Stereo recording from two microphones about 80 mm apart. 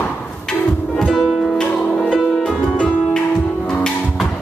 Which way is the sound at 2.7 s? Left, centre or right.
Centre.